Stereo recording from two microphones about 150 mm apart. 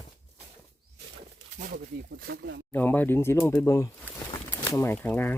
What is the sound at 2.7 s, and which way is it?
Speech, 10° left (ahead or behind).